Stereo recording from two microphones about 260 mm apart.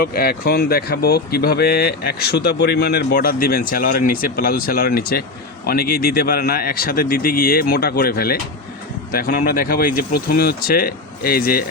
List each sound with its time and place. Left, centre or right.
0.0 s speech: left
10.0 s speech: left
10.2 s speech: left